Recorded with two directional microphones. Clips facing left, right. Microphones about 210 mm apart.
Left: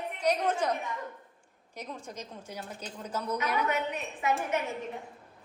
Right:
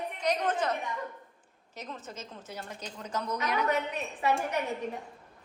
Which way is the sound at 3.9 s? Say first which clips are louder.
Right 1 dB; 35° right (ahead or behind).